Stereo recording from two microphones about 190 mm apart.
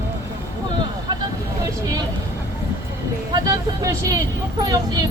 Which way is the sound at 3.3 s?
15° right (ahead or behind).